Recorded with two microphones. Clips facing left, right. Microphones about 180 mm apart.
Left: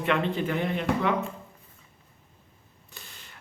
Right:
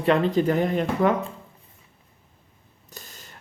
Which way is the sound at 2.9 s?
40° right (ahead or behind).